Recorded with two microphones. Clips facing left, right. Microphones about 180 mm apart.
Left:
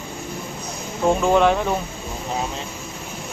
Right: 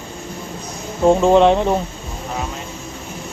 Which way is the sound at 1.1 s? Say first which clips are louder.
Right 5 dB; 25° right (ahead or behind).